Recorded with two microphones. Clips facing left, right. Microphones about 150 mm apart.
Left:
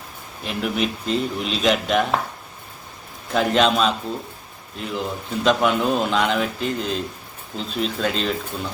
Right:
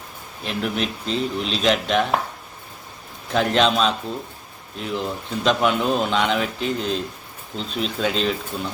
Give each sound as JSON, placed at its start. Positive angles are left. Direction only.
{"t": 0.4, "sound": "speech", "side_deg": 5}
{"t": 3.2, "sound": "speech", "side_deg": 0}